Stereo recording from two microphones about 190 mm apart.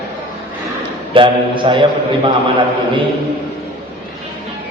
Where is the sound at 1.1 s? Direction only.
25° right (ahead or behind).